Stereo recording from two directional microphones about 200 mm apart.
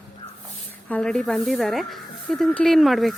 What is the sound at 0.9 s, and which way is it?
A woman's voice, 5° left (ahead or behind).